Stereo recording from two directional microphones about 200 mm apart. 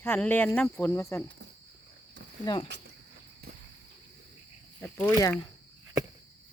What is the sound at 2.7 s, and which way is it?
Speech, 60° right (ahead or behind).